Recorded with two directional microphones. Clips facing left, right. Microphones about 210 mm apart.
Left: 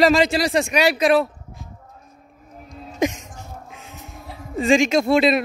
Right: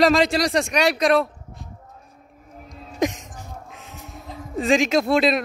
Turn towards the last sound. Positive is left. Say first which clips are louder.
# left 2 dB
turn(degrees=0)  # may be behind; listen again after turning